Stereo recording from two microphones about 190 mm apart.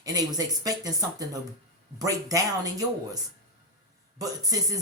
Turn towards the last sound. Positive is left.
turn(degrees=-20)  # may be behind; listen again after turning